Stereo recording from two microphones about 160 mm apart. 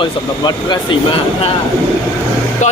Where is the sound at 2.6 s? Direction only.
50° left (ahead or behind).